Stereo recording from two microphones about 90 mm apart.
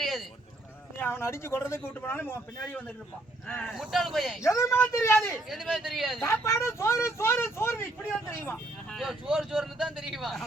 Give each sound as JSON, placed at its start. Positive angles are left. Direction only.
{"t": 0.0, "sound": "rowboat", "side_deg": 0}
{"t": 0.9, "sound": "a man's voice", "side_deg": 25}
{"t": 3.4, "sound": "a man's voice", "side_deg": 10}
{"t": 4.4, "sound": "speech", "side_deg": 35}
{"t": 5.5, "sound": "a man's voice", "side_deg": -5}
{"t": 6.2, "sound": "a man's voice", "side_deg": 35}
{"t": 9.0, "sound": "a man's voice", "side_deg": -5}